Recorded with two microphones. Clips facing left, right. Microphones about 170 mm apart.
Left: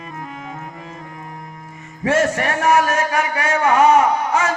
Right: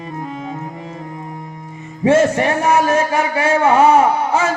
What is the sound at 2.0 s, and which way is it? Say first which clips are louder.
A man's voice: right 5 dB; 25° right (ahead or behind).